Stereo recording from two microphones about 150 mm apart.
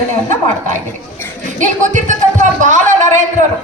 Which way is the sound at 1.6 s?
55° right (ahead or behind).